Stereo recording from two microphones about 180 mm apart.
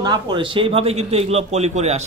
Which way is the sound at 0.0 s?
25° right (ahead or behind).